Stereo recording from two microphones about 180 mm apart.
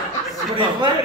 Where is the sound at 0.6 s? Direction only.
25° right (ahead or behind).